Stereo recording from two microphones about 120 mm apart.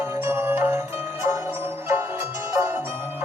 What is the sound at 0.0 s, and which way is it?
Music, 20° right (ahead or behind).